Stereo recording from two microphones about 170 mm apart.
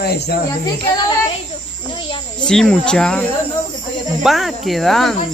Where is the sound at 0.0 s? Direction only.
70° left (ahead or behind).